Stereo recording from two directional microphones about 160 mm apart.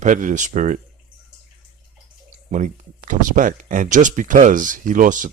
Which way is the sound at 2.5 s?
50° right (ahead or behind).